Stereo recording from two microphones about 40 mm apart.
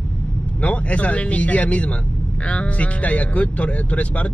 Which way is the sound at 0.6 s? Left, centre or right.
Left.